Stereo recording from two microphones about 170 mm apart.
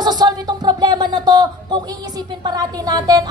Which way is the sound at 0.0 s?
25° right (ahead or behind).